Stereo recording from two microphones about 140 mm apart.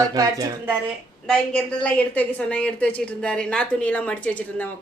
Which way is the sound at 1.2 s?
5° left (ahead or behind).